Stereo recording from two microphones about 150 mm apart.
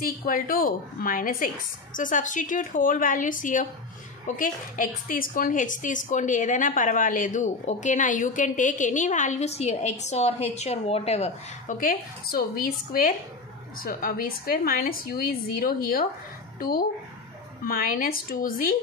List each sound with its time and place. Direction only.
0.0 s a woman's voice: 75° left (ahead or behind); by 11.7 s 45° left (ahead or behind)
11.8 s a woman's voice: 75° left (ahead or behind)